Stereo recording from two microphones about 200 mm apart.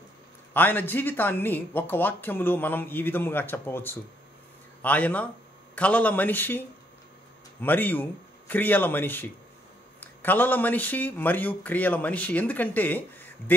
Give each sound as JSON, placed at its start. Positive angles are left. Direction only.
{"t": 0.5, "sound": "speech", "side_deg": 10}
{"t": 7.6, "sound": "speech", "side_deg": 10}